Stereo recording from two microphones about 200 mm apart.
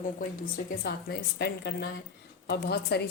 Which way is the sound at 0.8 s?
55° left (ahead or behind).